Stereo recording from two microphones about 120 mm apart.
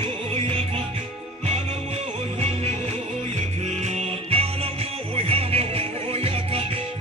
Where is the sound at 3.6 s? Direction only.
65° right (ahead or behind).